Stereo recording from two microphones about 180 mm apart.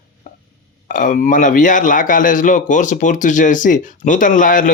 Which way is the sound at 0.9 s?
50° left (ahead or behind).